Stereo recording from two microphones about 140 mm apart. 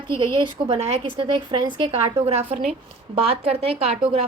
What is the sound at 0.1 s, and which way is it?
A woman's voice, 35° right (ahead or behind).